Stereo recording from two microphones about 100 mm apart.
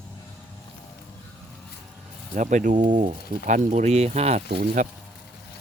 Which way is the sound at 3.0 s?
90° right.